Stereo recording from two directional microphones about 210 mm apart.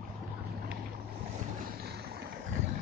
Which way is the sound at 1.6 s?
45° right (ahead or behind).